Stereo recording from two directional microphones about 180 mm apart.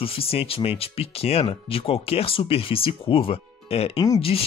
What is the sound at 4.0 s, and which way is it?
Speech, 20° left (ahead or behind).